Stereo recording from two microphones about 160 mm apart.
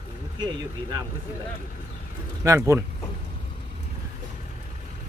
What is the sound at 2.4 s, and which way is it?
Speech, 20° right (ahead or behind).